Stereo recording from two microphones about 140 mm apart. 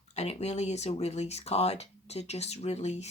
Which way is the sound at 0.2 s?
50° left (ahead or behind).